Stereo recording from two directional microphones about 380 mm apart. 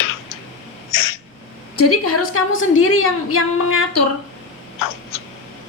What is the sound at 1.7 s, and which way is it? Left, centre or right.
A woman's voice, left.